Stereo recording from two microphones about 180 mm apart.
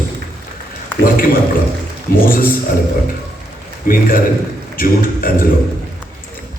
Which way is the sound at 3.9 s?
50° left (ahead or behind).